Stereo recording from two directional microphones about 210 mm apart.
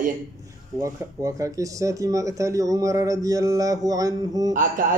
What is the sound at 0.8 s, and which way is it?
Speech, 15° right (ahead or behind).